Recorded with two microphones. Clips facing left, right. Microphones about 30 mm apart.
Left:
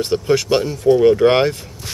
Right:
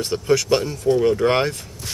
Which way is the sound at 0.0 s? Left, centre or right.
Left.